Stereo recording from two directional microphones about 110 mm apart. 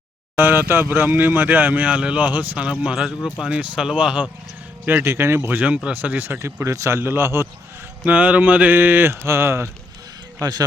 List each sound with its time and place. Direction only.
0.3 s speech: 20° right (ahead or behind)
4.9 s speech: 20° right (ahead or behind)
10.4 s speech: 35° right (ahead or behind)